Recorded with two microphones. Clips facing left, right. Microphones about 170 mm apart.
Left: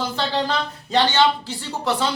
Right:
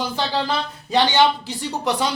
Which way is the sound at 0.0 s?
10° right (ahead or behind).